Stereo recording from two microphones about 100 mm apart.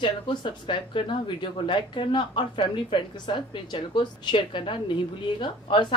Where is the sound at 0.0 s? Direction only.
55° left (ahead or behind).